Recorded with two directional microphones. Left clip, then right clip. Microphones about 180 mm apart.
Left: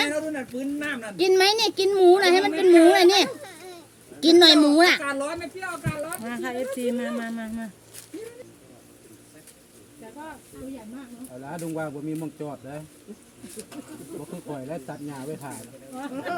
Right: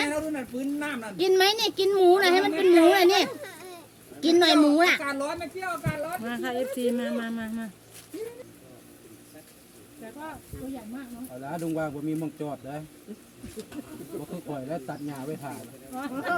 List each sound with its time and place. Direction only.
0.1 s speech: centre (ahead or behind)
1.1 s a woman's voice: 30° left (ahead or behind)
3.4 s a sound: 20° right (ahead or behind)
4.2 s speech: 45° left (ahead or behind)
4.9 s speech: 10° right (ahead or behind)
11.4 s speech: 10° left (ahead or behind)
14.5 s speech: 10° left (ahead or behind)